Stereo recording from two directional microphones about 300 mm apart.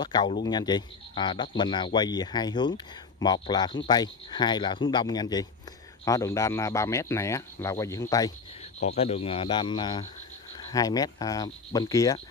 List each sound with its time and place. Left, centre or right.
0.0 s speech: centre